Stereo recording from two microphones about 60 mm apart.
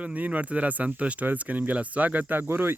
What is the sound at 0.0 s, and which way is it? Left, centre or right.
Speech, right.